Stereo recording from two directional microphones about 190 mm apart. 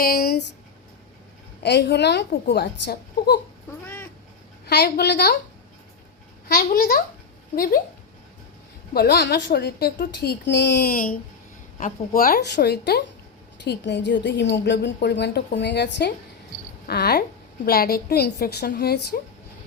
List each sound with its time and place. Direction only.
0.0 s speech: 55° left (ahead or behind)
1.6 s a woman's voice: 60° left (ahead or behind)
3.7 s cat: 10° left (ahead or behind)
4.6 s a woman's voice: 60° left (ahead or behind)
6.5 s a child's voice: 50° left (ahead or behind)
8.9 s a woman's voice: 55° left (ahead or behind)